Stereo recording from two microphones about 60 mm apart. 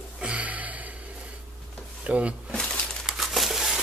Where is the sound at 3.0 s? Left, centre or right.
Centre.